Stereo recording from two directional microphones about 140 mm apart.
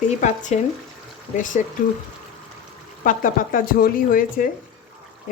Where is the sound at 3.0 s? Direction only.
70° left (ahead or behind).